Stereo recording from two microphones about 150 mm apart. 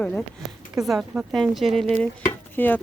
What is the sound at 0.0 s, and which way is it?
Speech, 10° left (ahead or behind).